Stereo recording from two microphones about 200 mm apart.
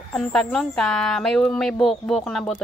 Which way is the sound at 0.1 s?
5° left (ahead or behind).